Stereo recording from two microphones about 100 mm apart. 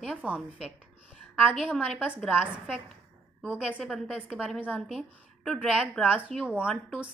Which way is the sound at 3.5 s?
10° right (ahead or behind).